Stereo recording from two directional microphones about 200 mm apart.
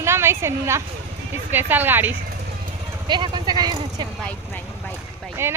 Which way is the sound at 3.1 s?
20° right (ahead or behind).